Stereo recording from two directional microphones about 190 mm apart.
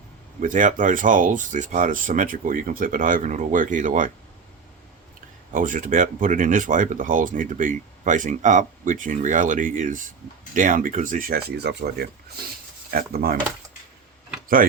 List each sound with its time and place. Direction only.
0.4 s speech: 45° right (ahead or behind)
5.5 s speech: 45° right (ahead or behind)